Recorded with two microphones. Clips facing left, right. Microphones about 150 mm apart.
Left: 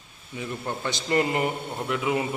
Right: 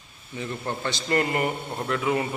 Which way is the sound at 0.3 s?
5° left (ahead or behind).